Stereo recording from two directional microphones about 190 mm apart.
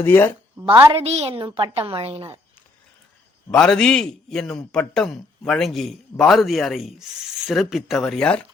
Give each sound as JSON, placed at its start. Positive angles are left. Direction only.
{"t": 0.0, "sound": "speech", "side_deg": 10}
{"t": 0.6, "sound": "a woman's voice", "side_deg": -25}
{"t": 3.5, "sound": "a man's voice", "side_deg": 5}